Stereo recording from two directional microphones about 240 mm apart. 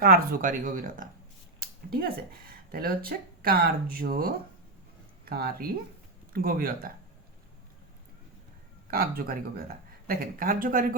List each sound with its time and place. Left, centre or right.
0.0 s speech: right
8.9 s speech: right